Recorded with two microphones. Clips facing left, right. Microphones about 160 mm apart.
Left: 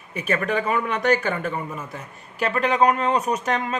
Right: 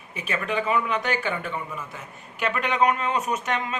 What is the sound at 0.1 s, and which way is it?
A man's voice, 45° left (ahead or behind).